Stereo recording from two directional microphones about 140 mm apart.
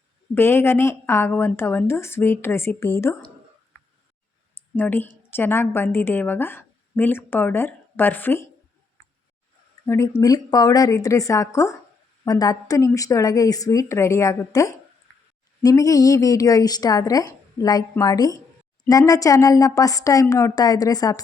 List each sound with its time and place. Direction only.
0.3 s a woman's voice: 15° left (ahead or behind)
4.8 s a woman's voice: 15° left (ahead or behind)
9.8 s a woman's voice: 20° left (ahead or behind)